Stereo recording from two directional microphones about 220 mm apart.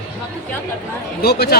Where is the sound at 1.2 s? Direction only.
45° left (ahead or behind).